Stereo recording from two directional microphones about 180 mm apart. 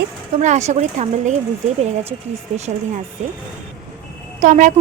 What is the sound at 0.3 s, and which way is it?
Speech, 40° right (ahead or behind).